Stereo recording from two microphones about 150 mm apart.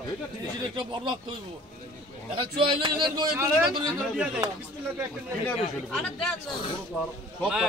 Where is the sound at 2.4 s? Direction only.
35° right (ahead or behind).